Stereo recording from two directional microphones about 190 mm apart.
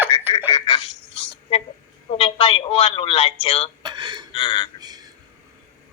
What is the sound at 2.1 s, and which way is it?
Speech, 30° left (ahead or behind).